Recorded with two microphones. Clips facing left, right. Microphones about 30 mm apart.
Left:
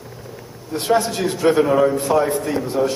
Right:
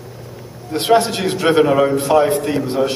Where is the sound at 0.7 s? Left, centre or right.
Right.